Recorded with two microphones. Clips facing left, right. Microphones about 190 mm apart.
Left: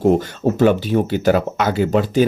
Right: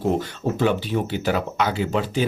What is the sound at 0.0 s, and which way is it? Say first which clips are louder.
Speech: left 7 dB; 45° left (ahead or behind).